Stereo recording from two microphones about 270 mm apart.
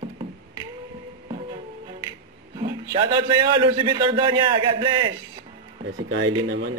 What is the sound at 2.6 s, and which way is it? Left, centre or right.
A man's voice, centre.